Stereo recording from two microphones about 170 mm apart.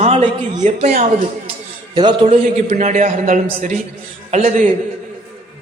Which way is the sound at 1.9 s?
25° right (ahead or behind).